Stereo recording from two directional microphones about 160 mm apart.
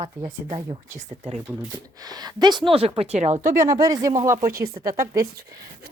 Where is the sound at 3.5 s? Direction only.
20° right (ahead or behind).